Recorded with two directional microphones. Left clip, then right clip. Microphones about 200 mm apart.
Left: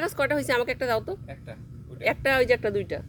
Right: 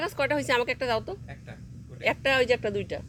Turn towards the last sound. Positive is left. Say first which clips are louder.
# left 3 dB
turn(degrees=5)  # may be behind; listen again after turning